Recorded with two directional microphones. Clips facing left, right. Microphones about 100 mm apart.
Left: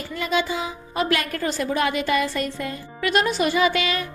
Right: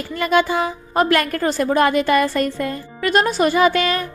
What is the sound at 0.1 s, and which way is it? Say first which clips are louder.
Speech: right 7 dB; 55° right (ahead or behind).